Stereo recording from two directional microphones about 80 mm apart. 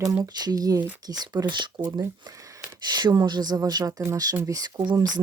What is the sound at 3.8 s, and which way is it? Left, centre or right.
Speech, right.